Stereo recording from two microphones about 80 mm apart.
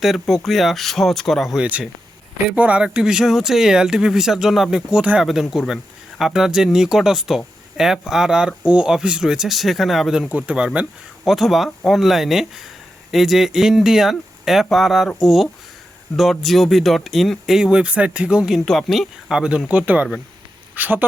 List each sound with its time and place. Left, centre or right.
0.0 s speech: centre
1.5 s speech: centre
11.3 s speech: centre
18.5 s speech: centre; by 21.0 s right